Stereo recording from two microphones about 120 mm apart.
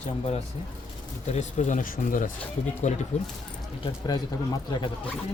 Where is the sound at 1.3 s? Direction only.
80° left.